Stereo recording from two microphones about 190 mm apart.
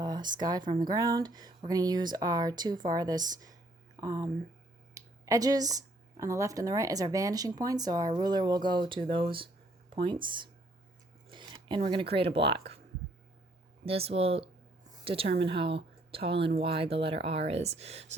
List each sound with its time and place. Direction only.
0.0 s speech: 20° right (ahead or behind)
11.3 s a sound: 25° right (ahead or behind)
12.1 s speech: 30° right (ahead or behind)
13.8 s a woman's voice: 30° right (ahead or behind)